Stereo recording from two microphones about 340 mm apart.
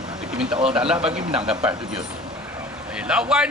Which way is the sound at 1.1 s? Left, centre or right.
Centre.